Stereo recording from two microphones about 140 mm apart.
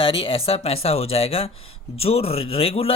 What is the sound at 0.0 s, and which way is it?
Speech, 40° left (ahead or behind).